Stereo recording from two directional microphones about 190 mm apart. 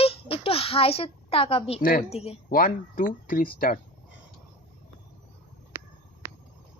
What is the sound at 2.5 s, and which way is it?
Speech, 45° left (ahead or behind).